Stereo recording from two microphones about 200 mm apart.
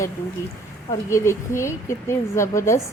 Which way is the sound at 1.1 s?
15° left (ahead or behind).